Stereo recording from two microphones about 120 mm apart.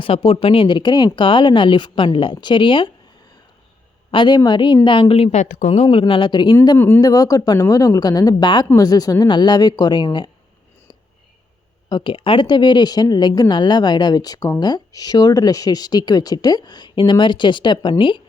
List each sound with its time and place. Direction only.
0.0 s speech: 50° left (ahead or behind)
4.1 s speech: 40° left (ahead or behind)
5.4 s speech: 90° left; by 6.6 s 40° left (ahead or behind)
6.7 s speech: 20° left (ahead or behind)
7.0 s speech: 30° left (ahead or behind)
11.9 s speech: 40° left (ahead or behind)